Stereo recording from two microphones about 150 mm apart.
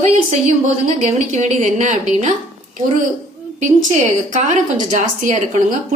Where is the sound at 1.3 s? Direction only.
55° right (ahead or behind).